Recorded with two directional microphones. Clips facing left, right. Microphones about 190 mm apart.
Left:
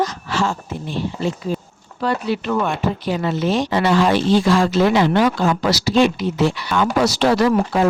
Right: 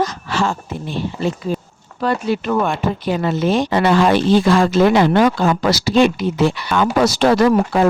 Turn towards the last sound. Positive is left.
turn(degrees=-55)  # may be behind; listen again after turning